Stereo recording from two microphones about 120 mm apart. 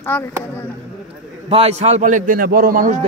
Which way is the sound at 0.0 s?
20° left (ahead or behind).